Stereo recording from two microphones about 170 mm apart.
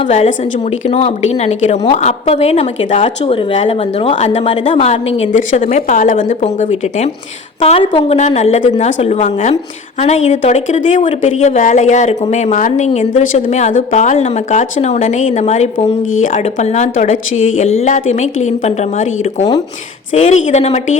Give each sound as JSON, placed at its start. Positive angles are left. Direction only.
{"t": 0.1, "sound": "a woman's voice", "side_deg": 45}